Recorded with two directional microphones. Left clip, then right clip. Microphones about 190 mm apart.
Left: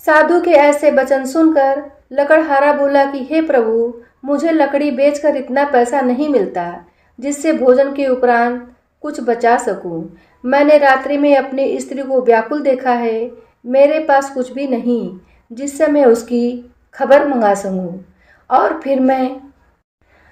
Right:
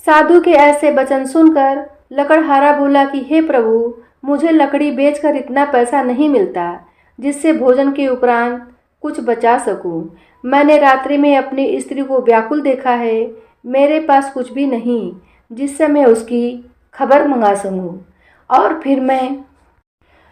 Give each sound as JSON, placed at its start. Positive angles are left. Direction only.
{"t": 0.0, "sound": "a woman's voice", "side_deg": -25}